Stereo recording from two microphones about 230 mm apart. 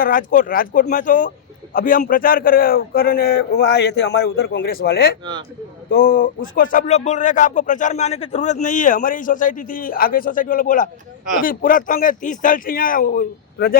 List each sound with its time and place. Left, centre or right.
0.0 s a man's voice: left